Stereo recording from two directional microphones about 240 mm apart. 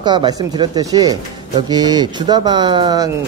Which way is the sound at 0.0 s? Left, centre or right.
Centre.